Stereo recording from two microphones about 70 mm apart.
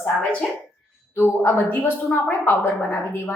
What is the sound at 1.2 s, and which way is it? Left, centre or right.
Speech, left.